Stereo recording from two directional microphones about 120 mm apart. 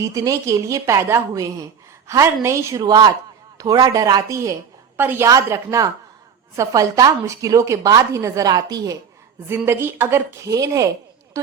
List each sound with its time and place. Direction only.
0.0 s a woman's voice: 25° right (ahead or behind)
5.3 s a woman's voice: 30° right (ahead or behind)
9.5 s a woman's voice: 20° right (ahead or behind)